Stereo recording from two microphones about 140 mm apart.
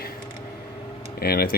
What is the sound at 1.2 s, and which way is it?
Speech, 90° left.